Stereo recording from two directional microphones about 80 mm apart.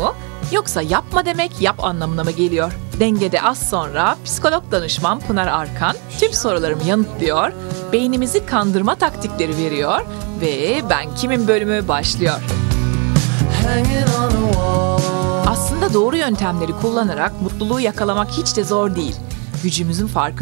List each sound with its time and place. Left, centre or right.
0.0 s speech: centre